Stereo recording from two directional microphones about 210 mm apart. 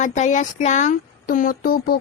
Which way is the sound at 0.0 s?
35° left (ahead or behind).